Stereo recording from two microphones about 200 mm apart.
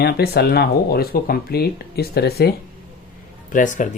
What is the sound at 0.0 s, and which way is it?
Speech, 55° left (ahead or behind).